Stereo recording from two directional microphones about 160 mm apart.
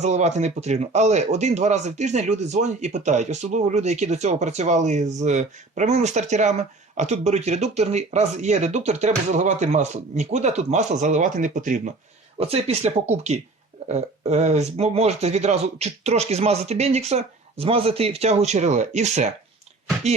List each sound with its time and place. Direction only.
0.0 s speech: 45° right (ahead or behind)
12.4 s speech: 40° right (ahead or behind)